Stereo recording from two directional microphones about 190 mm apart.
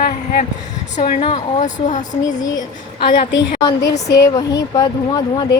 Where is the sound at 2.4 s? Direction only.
20° left (ahead or behind).